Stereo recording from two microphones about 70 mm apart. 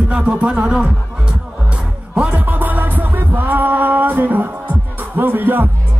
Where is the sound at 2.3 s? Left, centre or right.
Right.